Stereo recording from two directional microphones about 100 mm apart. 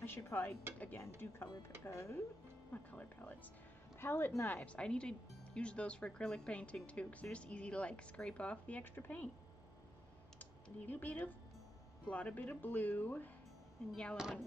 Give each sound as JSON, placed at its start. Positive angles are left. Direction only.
{"t": 0.0, "sound": "dishes", "side_deg": 25}
{"t": 0.7, "sound": "speech", "side_deg": 20}
{"t": 2.7, "sound": "speech", "side_deg": 15}
{"t": 10.4, "sound": "speech", "side_deg": 20}
{"t": 14.1, "sound": "speech", "side_deg": -5}